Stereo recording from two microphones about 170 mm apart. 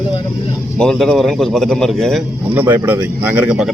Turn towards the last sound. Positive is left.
turn(degrees=-5)  # may be behind; listen again after turning